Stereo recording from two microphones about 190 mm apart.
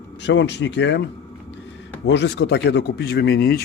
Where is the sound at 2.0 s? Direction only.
65° left (ahead or behind).